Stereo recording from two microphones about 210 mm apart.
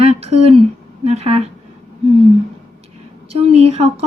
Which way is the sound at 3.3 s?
30° right (ahead or behind).